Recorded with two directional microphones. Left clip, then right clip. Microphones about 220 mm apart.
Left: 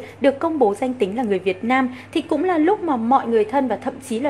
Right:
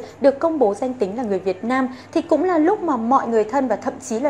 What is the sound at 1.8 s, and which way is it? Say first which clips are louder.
Speech: even; 40° left (ahead or behind).